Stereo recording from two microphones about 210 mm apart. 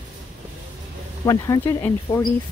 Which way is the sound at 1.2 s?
15° left (ahead or behind).